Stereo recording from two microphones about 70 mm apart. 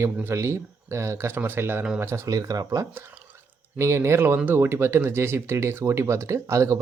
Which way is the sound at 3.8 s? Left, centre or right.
Right.